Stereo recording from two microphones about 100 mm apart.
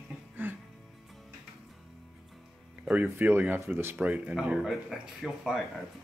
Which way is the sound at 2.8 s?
15° right (ahead or behind).